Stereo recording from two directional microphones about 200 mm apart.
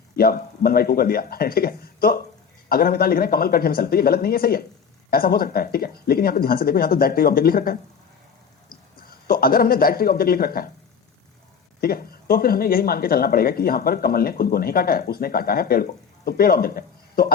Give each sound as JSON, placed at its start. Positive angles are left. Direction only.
{"t": 0.2, "sound": "speech", "side_deg": 50}
{"t": 9.0, "sound": "speech", "side_deg": 50}
{"t": 11.8, "sound": "speech", "side_deg": 50}